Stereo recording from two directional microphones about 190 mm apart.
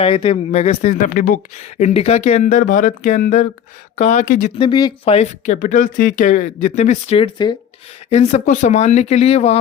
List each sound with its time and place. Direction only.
0.0 s speech: 30° left (ahead or behind); by 1.4 s 45° left (ahead or behind)
1.8 s speech: 35° left (ahead or behind)
4.5 s speech: 25° left (ahead or behind)